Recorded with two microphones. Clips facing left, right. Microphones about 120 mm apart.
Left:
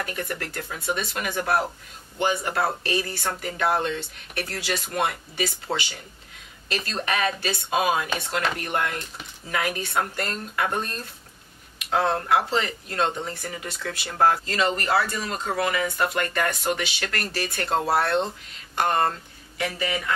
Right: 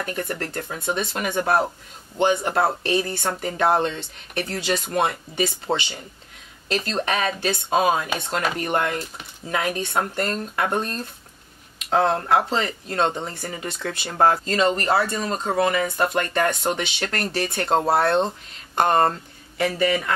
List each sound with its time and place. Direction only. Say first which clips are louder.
0.0 s speech: right 3 dB; 30° right (ahead or behind)
9.5 s speech: right 3 dB; 25° right (ahead or behind)